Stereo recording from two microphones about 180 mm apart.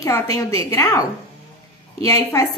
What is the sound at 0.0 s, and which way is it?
A woman's voice, 20° left (ahead or behind).